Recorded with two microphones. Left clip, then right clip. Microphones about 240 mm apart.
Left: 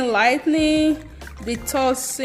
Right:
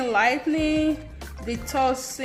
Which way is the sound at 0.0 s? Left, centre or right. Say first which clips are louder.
Left 4 dB; left.